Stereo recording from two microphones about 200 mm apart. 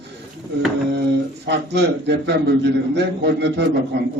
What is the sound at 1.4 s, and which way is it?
A man's voice, 60° right (ahead or behind).